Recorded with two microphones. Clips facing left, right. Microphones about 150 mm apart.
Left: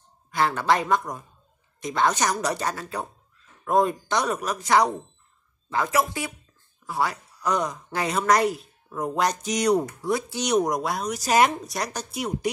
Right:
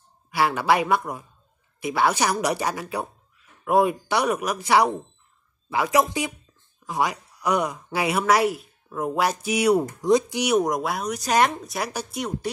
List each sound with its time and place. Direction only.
0.3 s a woman's voice: 10° right (ahead or behind)
10.0 s speech: 20° right (ahead or behind)
10.4 s speech: centre (ahead or behind)
12.2 s speech: 10° left (ahead or behind)